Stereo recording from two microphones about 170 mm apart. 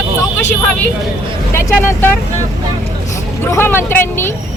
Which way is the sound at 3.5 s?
15° left (ahead or behind).